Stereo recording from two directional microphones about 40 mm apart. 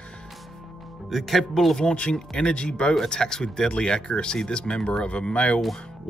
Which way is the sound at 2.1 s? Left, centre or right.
Centre.